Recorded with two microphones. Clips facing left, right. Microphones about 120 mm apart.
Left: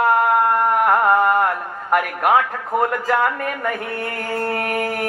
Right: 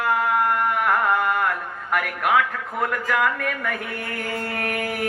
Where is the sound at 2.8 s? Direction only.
35° left (ahead or behind).